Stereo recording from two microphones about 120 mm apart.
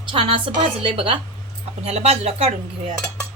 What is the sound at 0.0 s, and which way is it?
A woman's voice, 45° right (ahead or behind).